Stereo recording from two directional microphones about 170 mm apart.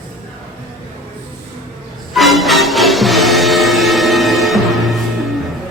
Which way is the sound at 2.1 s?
Centre (ahead or behind).